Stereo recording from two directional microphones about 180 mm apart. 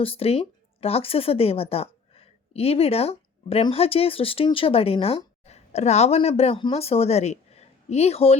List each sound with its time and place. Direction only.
0.0 s speech: 30° left (ahead or behind)